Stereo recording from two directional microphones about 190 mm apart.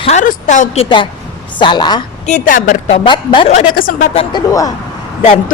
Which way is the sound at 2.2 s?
45° left (ahead or behind).